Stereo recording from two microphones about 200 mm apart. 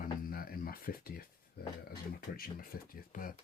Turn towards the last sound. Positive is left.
turn(degrees=45)  # may be behind; listen again after turning